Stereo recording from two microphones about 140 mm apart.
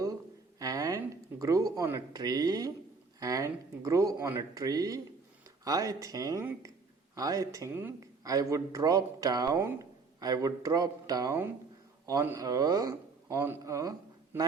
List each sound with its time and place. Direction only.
0.6 s speech: 25° right (ahead or behind)